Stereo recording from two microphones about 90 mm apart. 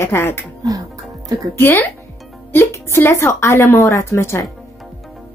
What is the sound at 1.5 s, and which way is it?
A woman's voice, 25° left (ahead or behind).